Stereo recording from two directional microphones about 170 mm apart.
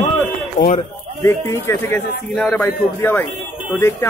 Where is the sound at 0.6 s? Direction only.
25° left (ahead or behind).